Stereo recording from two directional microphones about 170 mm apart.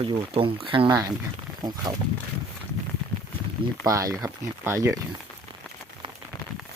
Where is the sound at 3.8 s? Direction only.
20° right (ahead or behind).